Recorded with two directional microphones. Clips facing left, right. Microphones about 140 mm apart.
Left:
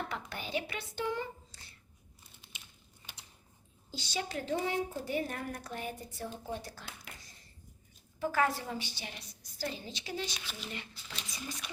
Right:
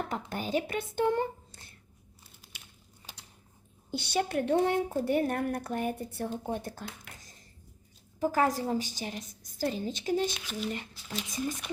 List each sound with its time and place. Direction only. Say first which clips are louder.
0.1 s speech: right 6 dB; 45° right (ahead or behind)
3.9 s a woman's voice: right 8 dB; 60° right (ahead or behind)
8.2 s a woman's voice: right 4 dB; 40° right (ahead or behind)